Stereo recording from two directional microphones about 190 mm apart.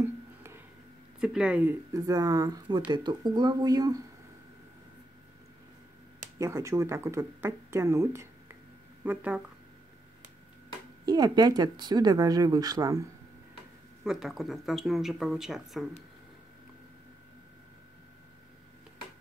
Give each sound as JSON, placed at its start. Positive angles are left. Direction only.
{"t": 0.0, "sound": "a sound", "side_deg": -15}
{"t": 1.2, "sound": "speech", "side_deg": -5}
{"t": 6.3, "sound": "speech", "side_deg": -15}
{"t": 11.1, "sound": "speech", "side_deg": -20}
{"t": 14.0, "sound": "speech", "side_deg": 0}